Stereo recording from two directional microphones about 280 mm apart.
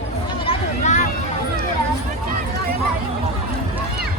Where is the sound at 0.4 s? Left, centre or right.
Left.